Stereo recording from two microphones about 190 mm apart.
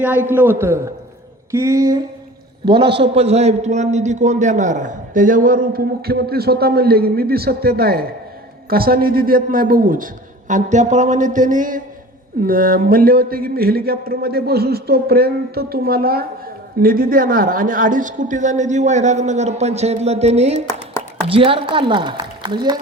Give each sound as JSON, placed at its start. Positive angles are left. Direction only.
{"t": 0.3, "sound": "a man's voice", "side_deg": -10}